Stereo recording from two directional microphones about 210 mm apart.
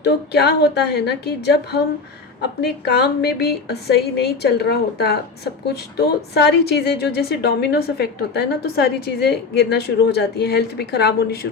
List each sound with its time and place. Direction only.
0.0 s a woman's voice: 50° left (ahead or behind)